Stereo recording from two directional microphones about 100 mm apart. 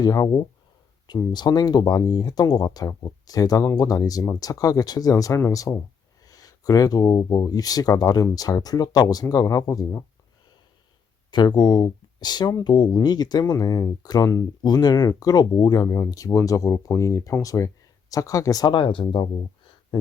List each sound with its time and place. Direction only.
0.0 s speech: 35° left (ahead or behind)
11.3 s speech: 45° left (ahead or behind)